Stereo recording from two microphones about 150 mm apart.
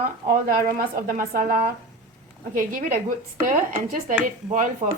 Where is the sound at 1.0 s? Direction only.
70° right (ahead or behind).